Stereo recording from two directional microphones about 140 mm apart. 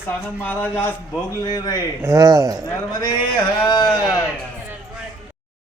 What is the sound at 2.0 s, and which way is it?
Speech, 25° right (ahead or behind).